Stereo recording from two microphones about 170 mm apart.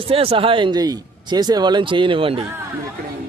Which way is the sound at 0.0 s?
35° right (ahead or behind).